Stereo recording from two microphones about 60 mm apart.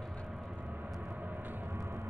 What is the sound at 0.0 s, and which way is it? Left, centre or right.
Vehicle, centre.